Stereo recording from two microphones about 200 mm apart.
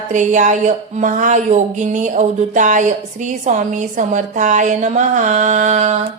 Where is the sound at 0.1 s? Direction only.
40° right (ahead or behind).